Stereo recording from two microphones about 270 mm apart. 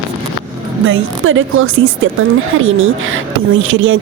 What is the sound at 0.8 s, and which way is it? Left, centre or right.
A man's voice, right.